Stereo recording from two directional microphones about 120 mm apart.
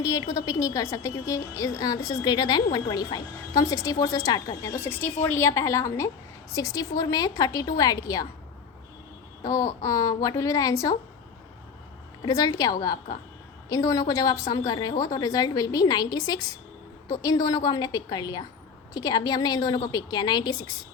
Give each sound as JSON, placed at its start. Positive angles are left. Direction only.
{"t": 0.0, "sound": "a woman's voice", "side_deg": 30}
{"t": 9.4, "sound": "a woman's voice", "side_deg": 30}
{"t": 12.2, "sound": "a woman's voice", "side_deg": 30}